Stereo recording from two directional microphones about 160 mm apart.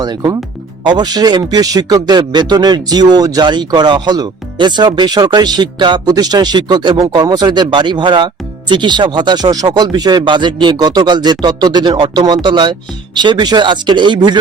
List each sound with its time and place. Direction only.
0.0 s speech: 25° right (ahead or behind)